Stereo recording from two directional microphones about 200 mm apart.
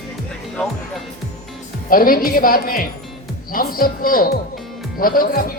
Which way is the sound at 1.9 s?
45° left (ahead or behind).